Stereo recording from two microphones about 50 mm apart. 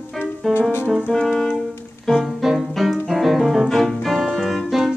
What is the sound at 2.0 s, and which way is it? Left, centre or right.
Music, centre.